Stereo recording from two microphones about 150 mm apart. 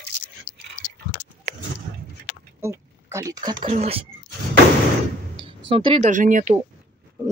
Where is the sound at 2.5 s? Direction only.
20° right (ahead or behind).